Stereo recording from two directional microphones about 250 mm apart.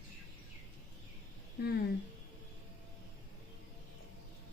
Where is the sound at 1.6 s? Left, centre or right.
Left.